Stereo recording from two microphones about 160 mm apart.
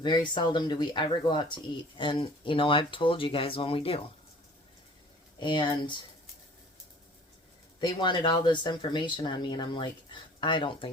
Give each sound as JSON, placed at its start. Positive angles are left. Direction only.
{"t": 0.0, "sound": "speech", "side_deg": 30}
{"t": 5.4, "sound": "speech", "side_deg": 30}
{"t": 7.8, "sound": "speech", "side_deg": 30}